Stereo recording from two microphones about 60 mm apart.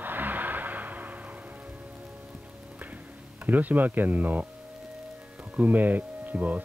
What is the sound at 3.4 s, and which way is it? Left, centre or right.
Speech, right.